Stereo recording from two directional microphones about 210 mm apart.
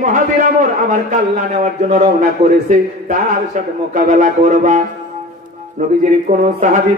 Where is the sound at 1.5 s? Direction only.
35° right (ahead or behind).